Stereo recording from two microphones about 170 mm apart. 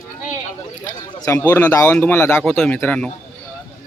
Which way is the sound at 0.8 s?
20° left (ahead or behind).